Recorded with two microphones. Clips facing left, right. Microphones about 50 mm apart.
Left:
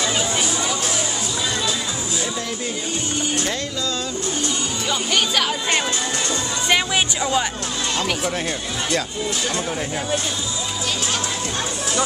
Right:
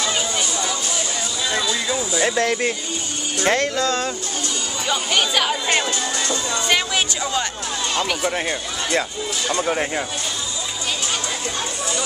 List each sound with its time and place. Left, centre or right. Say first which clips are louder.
2.1 s speech: right 10 dB; right
4.8 s speech: right 1 dB; centre
8.3 s speech: right 1 dB; right